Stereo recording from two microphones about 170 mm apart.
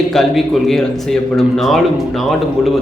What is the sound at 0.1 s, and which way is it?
A man's voice, centre (ahead or behind).